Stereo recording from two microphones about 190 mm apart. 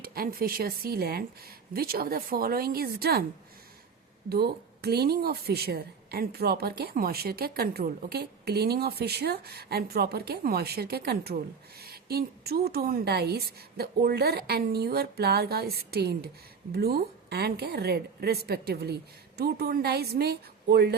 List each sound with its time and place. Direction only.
0.0 s speech: 50° right (ahead or behind)
4.3 s a woman's voice: 55° right (ahead or behind)